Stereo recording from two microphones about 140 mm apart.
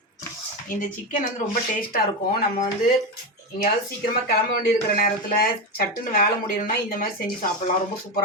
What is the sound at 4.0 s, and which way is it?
Speech, 90° left.